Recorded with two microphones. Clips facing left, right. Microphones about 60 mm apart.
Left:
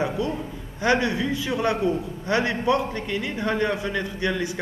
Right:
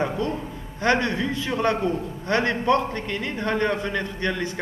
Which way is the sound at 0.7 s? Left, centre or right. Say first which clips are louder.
Even; centre.